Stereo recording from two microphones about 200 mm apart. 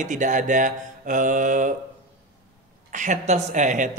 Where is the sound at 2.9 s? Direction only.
35° right (ahead or behind).